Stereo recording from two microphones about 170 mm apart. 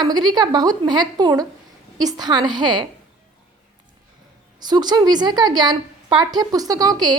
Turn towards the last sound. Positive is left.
turn(degrees=-25)  # may be behind; listen again after turning